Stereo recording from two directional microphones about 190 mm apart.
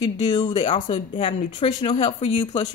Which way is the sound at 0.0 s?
20° left (ahead or behind).